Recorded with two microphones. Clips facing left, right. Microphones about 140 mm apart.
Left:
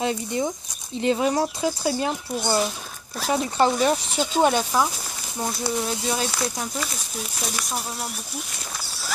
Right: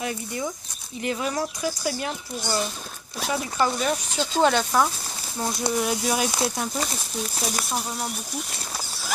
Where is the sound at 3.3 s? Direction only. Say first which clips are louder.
Left 4 dB; 30° left (ahead or behind).